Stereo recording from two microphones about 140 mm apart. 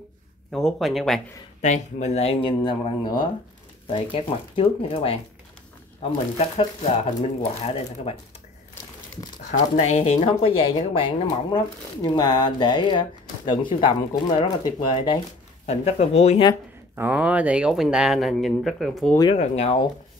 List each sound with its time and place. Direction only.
0.5 s speech: 5° left (ahead or behind)
1.6 s speech: 55° left (ahead or behind)
6.3 s speech: 55° left (ahead or behind)
9.5 s speech: 50° left (ahead or behind); by 15.2 s 35° left (ahead or behind)
15.6 s speech: 50° left (ahead or behind)
16.9 s speech: 10° right (ahead or behind)
19.3 s speech: 50° left (ahead or behind)